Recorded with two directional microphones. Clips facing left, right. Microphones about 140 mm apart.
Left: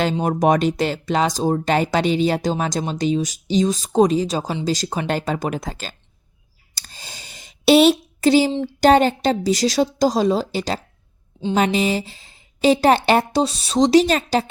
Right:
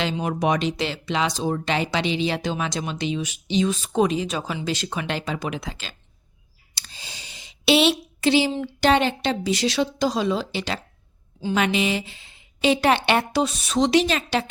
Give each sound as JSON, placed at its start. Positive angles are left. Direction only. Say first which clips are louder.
{"t": 0.0, "sound": "speech", "louder": "left 5 dB", "side_deg": 40}
{"t": 6.7, "sound": "a sound", "louder": "left 2 dB", "side_deg": 45}
{"t": 8.6, "sound": "speech", "louder": "left 5 dB", "side_deg": 40}